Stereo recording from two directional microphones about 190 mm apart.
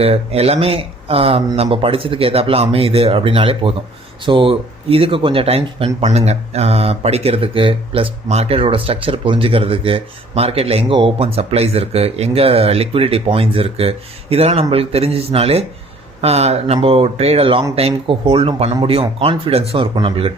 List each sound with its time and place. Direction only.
0.0 s speech: 30° right (ahead or behind)